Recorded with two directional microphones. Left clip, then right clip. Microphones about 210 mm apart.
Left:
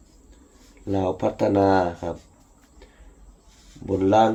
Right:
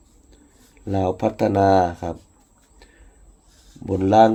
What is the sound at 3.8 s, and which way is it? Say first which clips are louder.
Speech: right 3 dB; 55° right (ahead or behind).